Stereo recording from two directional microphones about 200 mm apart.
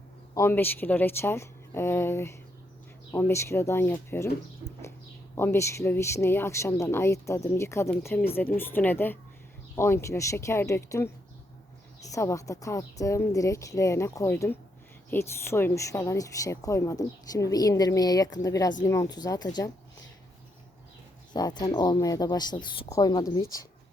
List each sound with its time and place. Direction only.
0.3 s speech: 10° left (ahead or behind)
5.3 s speech: 10° left (ahead or behind)
21.3 s speech: 20° left (ahead or behind)